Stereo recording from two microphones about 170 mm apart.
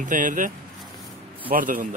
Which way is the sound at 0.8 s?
Centre (ahead or behind).